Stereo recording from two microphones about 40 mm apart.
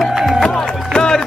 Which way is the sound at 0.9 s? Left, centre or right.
Left.